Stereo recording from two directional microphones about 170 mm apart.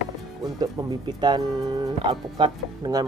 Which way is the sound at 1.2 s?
25° right (ahead or behind).